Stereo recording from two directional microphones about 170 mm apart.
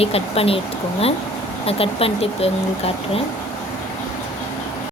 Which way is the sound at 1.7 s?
35° left (ahead or behind).